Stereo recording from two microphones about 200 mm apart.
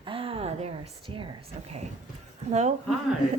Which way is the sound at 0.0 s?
25° right (ahead or behind).